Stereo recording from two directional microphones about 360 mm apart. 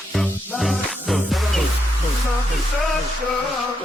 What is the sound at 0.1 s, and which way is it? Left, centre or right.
Music, centre.